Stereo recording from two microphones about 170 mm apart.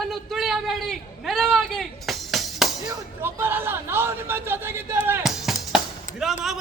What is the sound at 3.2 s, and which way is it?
A man's voice, 15° right (ahead or behind).